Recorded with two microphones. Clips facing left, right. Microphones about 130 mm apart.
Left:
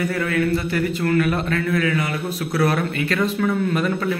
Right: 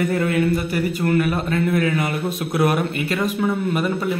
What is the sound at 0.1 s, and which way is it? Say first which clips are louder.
A man's voice: right 2 dB; 25° right (ahead or behind).